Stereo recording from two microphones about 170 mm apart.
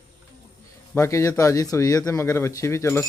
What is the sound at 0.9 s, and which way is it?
Speech, 15° left (ahead or behind).